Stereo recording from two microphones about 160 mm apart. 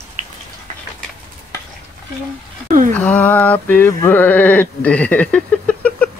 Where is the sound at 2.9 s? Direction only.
10° left (ahead or behind).